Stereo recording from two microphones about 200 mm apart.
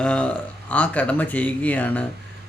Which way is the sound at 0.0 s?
5° left (ahead or behind).